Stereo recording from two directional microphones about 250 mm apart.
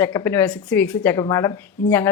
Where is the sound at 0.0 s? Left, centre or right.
Centre.